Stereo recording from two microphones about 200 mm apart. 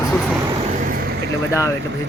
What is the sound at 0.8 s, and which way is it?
Vehicle, 40° right (ahead or behind).